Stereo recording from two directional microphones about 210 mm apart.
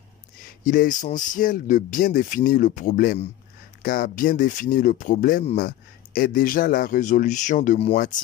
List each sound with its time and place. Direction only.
0.7 s speech: 40° left (ahead or behind)